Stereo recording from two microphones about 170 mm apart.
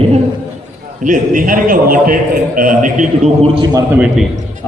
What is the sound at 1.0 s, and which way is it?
A man's voice, 50° right (ahead or behind).